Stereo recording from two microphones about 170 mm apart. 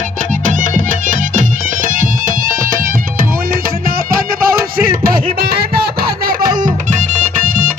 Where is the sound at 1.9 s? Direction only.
55° right (ahead or behind).